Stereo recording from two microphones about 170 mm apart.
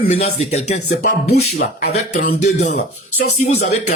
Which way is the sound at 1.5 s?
70° left (ahead or behind).